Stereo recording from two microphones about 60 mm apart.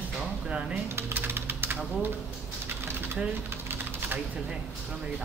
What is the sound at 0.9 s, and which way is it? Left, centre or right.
Typing, right.